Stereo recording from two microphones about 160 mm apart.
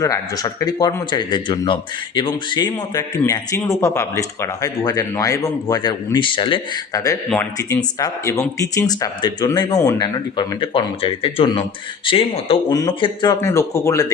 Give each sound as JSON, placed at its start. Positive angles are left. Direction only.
{"t": 0.0, "sound": "speech", "side_deg": 20}
{"t": 6.9, "sound": "speech", "side_deg": 20}
{"t": 12.7, "sound": "speech", "side_deg": 25}